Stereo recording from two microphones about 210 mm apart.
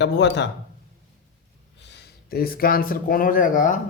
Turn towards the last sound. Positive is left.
turn(degrees=40)  # may be behind; listen again after turning